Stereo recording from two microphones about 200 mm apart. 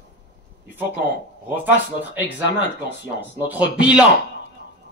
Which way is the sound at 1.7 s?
10° right (ahead or behind).